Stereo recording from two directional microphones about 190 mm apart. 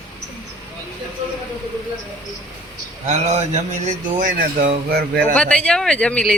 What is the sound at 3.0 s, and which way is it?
A man's voice, 40° right (ahead or behind).